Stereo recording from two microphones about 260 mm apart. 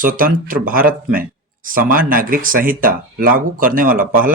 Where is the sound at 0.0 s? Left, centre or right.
Right.